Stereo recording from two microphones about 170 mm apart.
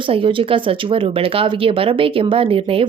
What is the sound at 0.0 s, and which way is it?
A woman's voice, 30° right (ahead or behind).